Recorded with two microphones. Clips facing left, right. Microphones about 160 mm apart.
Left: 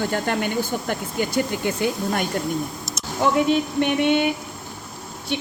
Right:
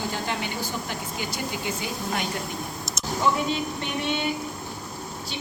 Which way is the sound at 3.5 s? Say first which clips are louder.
Left 8 dB; 60° left (ahead or behind).